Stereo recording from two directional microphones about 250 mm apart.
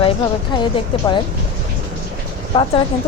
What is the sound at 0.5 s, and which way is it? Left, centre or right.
Speech, centre.